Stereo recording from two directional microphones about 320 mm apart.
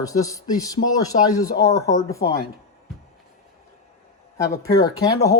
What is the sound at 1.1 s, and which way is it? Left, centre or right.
Speech, left.